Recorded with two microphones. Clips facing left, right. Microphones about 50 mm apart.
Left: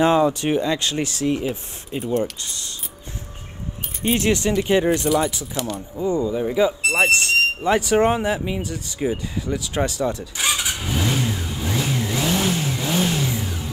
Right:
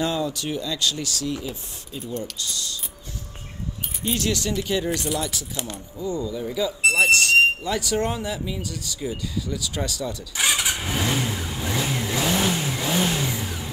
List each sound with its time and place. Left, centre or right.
0.0 s speech: left
4.0 s speech: left
10.3 s vehicle: right